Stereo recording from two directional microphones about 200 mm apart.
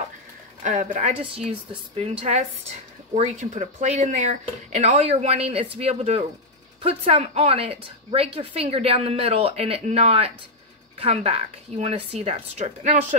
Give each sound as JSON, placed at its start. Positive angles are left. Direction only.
{"t": 0.7, "sound": "speech", "side_deg": -35}
{"t": 1.1, "sound": "a woman's voice", "side_deg": -5}
{"t": 2.0, "sound": "a woman's voice", "side_deg": -30}